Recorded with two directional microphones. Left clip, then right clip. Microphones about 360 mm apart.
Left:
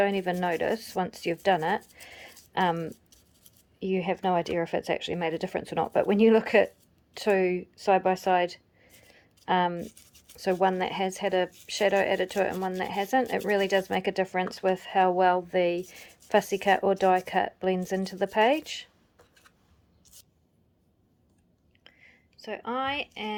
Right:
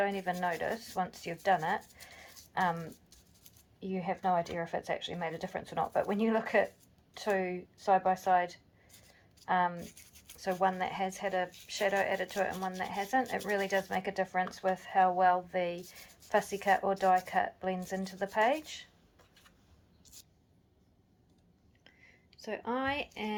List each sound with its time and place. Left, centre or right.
0.0 s speech: left
9.1 s a sound: left
10.3 s speech: left
22.4 s speech: centre